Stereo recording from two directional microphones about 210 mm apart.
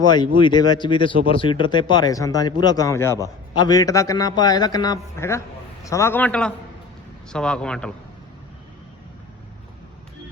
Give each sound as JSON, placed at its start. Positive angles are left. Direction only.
{"t": 0.3, "sound": "speech", "side_deg": 20}